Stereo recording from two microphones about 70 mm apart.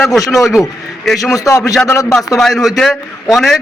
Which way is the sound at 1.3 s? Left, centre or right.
Left.